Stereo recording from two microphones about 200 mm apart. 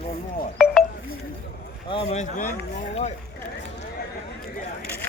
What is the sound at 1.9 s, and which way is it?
Speech, 30° left (ahead or behind).